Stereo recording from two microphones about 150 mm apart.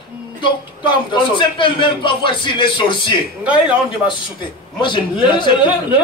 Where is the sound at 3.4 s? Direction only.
10° right (ahead or behind).